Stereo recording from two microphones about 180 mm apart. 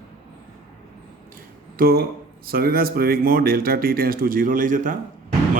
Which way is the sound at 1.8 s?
55° right (ahead or behind).